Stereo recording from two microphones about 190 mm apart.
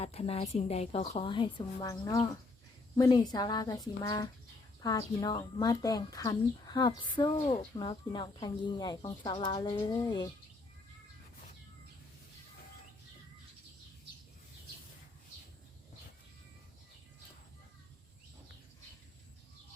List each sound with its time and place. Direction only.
0.0 s a woman's voice: 35° left (ahead or behind)